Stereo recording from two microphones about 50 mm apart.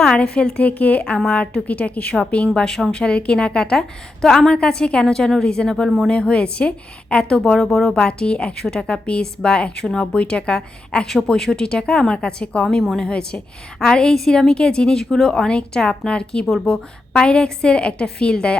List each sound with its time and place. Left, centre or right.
0.2 s a woman's voice: left
0.7 s a woman's voice: left
2.6 s a woman's voice: centre
3.0 s a woman's voice: left
6.1 s a woman's voice: centre
7.3 s a woman's voice: centre
7.7 s speech: centre
7.9 s a woman's voice: left
12.7 s a woman's voice: centre
13.1 s a woman's voice: centre